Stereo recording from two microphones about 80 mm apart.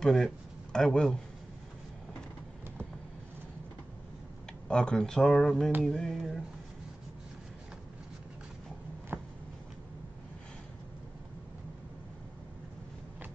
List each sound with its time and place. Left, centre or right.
0.0 s speech: centre
4.6 s speech: centre
9.1 s a sound: right